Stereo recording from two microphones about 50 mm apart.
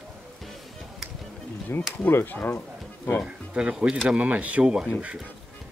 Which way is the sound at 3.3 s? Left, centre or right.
Right.